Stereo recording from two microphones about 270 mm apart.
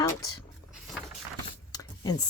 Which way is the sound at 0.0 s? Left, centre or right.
Centre.